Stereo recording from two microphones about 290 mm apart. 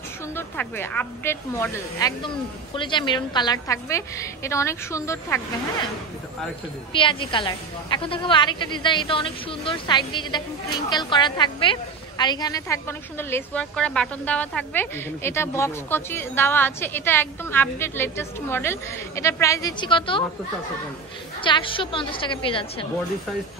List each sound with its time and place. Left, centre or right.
0.4 s a woman's voice: centre
6.9 s a woman's voice: centre
21.4 s a woman's voice: centre